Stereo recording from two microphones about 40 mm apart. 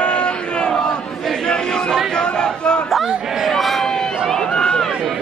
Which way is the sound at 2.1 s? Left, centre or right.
Centre.